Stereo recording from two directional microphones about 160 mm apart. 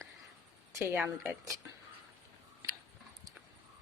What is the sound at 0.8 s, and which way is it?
Speech, 10° right (ahead or behind).